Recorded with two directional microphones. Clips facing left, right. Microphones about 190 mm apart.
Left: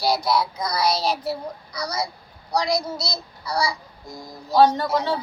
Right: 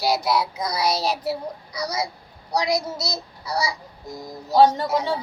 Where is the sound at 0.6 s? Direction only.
20° right (ahead or behind).